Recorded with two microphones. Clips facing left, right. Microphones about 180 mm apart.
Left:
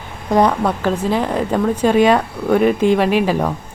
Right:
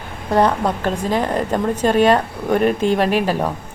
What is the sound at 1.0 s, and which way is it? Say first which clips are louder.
Speech: left 1 dB; 10° left (ahead or behind).